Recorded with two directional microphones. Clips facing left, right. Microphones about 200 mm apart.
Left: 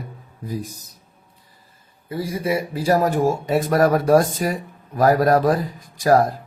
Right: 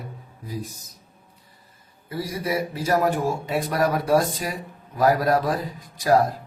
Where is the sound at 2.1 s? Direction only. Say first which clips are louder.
Left 4 dB; 25° left (ahead or behind); by 5.5 s 45° left (ahead or behind).